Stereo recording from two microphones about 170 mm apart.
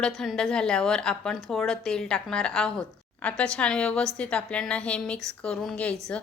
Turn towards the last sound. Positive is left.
turn(degrees=5)  # may be behind; listen again after turning